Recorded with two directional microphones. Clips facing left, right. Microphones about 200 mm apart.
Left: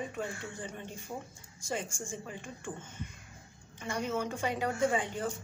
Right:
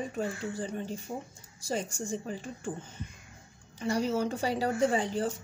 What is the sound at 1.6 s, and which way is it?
A woman's voice, 35° right (ahead or behind).